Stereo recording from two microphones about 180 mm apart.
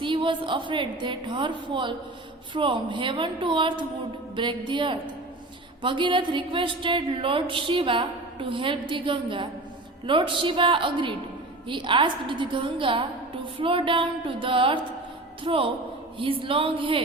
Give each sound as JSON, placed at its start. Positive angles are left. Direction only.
{"t": 0.0, "sound": "a woman's voice", "side_deg": -25}